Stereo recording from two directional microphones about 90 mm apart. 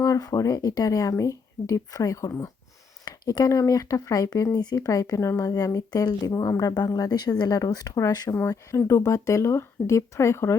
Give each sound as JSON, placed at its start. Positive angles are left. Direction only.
{"t": 0.0, "sound": "speech", "side_deg": 40}
{"t": 8.4, "sound": "speech", "side_deg": 30}